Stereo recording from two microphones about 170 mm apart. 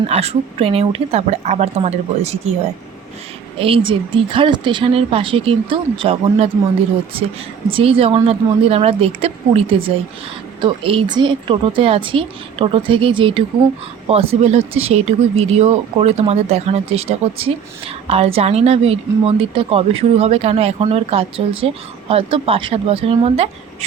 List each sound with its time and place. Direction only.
0.1 s speech: 40° right (ahead or behind)
3.6 s speech: 30° right (ahead or behind)
7.7 s speech: 35° right (ahead or behind)